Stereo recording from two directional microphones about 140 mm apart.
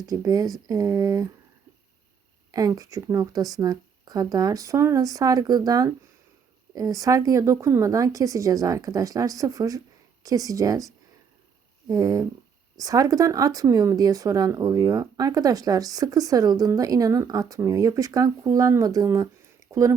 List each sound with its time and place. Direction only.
0.0 s speech: 25° right (ahead or behind)
2.5 s speech: 25° right (ahead or behind)